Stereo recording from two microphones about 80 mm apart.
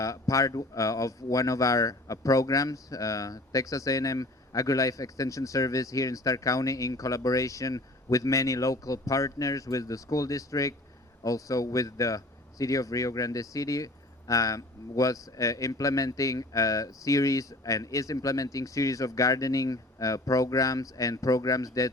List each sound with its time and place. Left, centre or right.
0.0 s speech: left